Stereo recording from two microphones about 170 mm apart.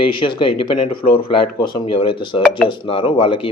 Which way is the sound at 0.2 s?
30° left (ahead or behind).